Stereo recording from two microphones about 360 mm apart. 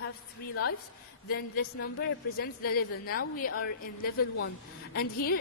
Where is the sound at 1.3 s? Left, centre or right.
Left.